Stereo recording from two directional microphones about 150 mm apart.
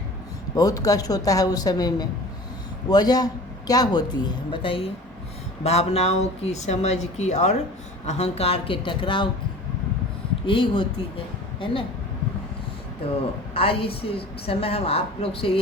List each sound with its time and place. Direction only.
0.5 s a woman's voice: 25° left (ahead or behind)
10.4 s a woman's voice: 35° left (ahead or behind)
13.5 s a woman's voice: 40° left (ahead or behind)